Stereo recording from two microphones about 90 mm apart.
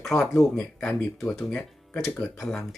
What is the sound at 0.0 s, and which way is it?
Speech, 5° left (ahead or behind).